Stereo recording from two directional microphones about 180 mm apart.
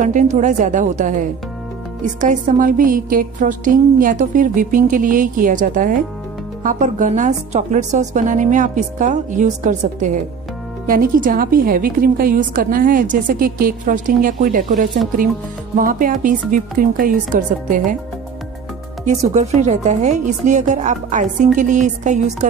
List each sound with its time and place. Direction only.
0.0 s a woman's voice: 45° right (ahead or behind)
19.0 s a woman's voice: 40° right (ahead or behind)